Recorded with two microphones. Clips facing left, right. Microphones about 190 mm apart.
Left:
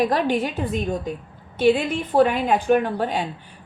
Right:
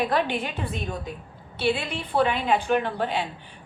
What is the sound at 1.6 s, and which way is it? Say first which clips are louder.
A woman's voice: left 7 dB; 45° left (ahead or behind).